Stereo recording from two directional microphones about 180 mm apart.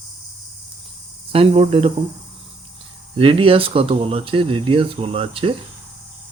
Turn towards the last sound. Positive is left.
turn(degrees=-30)  # may be behind; listen again after turning